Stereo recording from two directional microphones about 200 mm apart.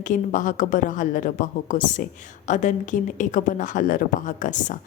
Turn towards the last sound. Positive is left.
turn(degrees=40)  # may be behind; listen again after turning